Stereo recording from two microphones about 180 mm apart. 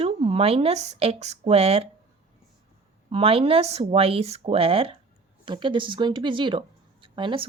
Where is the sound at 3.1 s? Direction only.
30° right (ahead or behind).